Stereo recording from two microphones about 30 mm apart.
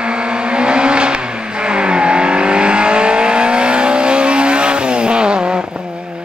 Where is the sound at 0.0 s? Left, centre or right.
Right.